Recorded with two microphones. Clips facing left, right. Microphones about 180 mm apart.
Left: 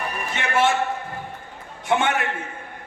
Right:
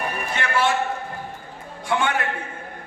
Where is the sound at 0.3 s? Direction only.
25° left (ahead or behind).